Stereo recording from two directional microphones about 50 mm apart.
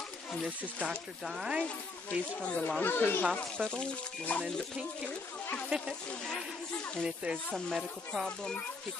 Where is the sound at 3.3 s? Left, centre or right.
Centre.